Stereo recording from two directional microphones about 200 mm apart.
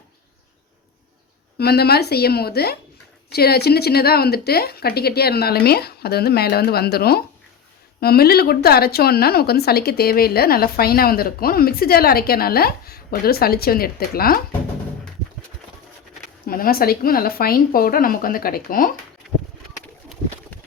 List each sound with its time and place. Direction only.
1.5 s speech: 55° left (ahead or behind)
16.5 s speech: 45° left (ahead or behind)